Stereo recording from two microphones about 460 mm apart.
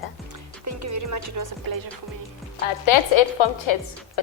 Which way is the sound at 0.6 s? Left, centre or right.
Right.